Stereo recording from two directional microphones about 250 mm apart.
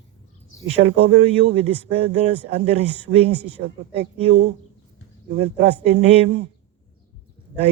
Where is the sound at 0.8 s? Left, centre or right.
Right.